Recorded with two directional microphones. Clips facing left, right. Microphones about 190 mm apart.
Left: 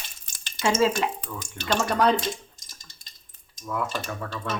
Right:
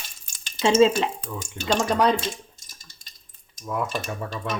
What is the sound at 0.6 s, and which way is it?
Stir, 25° right (ahead or behind).